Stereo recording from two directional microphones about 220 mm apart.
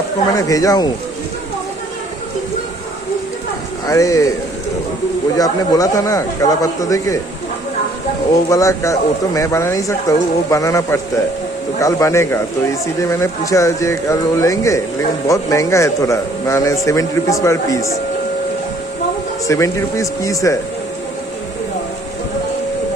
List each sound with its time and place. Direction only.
0.3 s speech: 15° left (ahead or behind)
3.8 s speech: 15° left (ahead or behind)
5.4 s speech: 15° left (ahead or behind)
8.4 s speech: 15° left (ahead or behind)
19.5 s speech: 15° left (ahead or behind)